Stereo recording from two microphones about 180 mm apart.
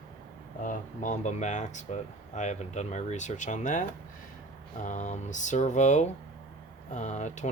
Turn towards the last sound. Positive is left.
turn(degrees=40)  # may be behind; listen again after turning